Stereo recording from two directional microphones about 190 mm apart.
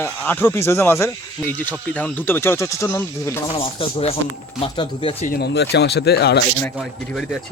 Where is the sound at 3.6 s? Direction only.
30° left (ahead or behind).